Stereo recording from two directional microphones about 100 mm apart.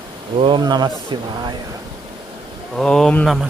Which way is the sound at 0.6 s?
45° right (ahead or behind).